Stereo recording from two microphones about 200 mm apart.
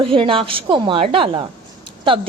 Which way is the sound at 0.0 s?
25° right (ahead or behind).